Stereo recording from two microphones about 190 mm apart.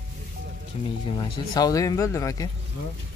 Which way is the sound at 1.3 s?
20° left (ahead or behind).